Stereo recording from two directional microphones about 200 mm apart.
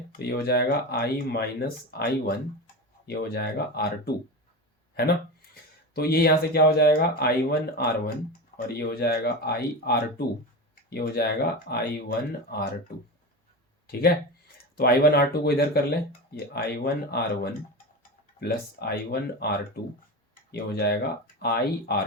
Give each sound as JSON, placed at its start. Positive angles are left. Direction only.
{"t": 0.2, "sound": "speech", "side_deg": 55}
{"t": 5.9, "sound": "speech", "side_deg": 50}
{"t": 13.8, "sound": "speech", "side_deg": 50}